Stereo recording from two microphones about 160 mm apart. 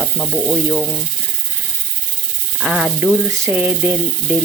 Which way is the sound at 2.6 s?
5° right (ahead or behind).